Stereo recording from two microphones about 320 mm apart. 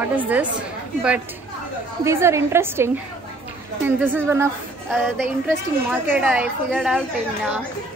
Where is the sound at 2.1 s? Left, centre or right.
Centre.